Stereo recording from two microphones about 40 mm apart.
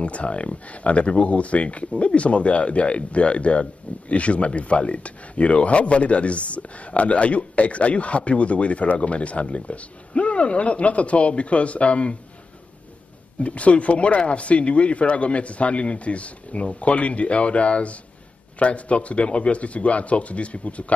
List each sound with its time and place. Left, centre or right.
0.0 s speech: left
13.4 s speech: left